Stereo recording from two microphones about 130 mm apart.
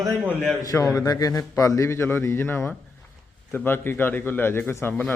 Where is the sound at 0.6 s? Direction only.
25° left (ahead or behind).